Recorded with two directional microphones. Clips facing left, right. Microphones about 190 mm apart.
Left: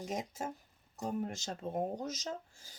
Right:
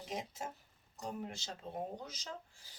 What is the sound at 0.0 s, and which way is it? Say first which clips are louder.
Speech: left 4 dB; 45° left (ahead or behind).